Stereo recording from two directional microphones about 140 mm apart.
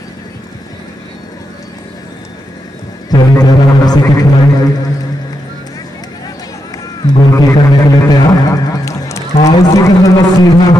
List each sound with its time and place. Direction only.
3.1 s speech: 30° left (ahead or behind)
7.1 s a man's voice: 30° left (ahead or behind)